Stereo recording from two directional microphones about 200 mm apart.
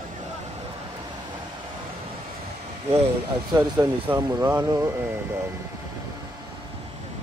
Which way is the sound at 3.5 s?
15° right (ahead or behind).